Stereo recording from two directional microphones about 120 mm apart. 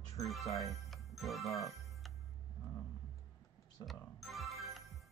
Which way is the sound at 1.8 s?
Centre (ahead or behind).